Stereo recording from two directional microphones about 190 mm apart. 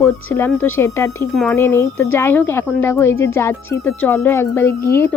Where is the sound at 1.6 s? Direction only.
15° left (ahead or behind).